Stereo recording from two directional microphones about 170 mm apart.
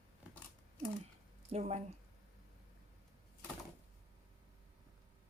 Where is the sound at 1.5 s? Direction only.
40° right (ahead or behind).